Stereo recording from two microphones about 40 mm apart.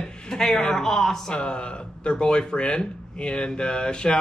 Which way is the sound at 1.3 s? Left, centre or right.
Left.